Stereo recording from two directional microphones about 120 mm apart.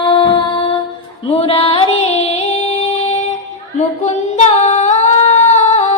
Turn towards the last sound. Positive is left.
turn(degrees=65)  # may be behind; listen again after turning